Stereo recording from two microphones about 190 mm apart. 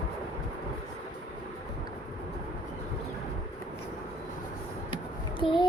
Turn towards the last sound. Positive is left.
turn(degrees=0)  # may be behind; listen again after turning